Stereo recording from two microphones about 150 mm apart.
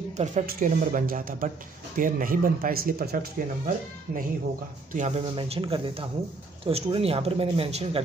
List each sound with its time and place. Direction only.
0.2 s speech: 50° right (ahead or behind)
0.5 s speech: 65° right (ahead or behind)
4.9 s speech: 50° right (ahead or behind)
5.3 s speech: 35° right (ahead or behind)